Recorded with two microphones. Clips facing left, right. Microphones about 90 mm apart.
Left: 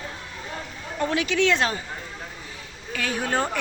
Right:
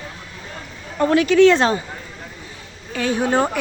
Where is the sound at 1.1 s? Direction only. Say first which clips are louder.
Right 10 dB; 45° right (ahead or behind).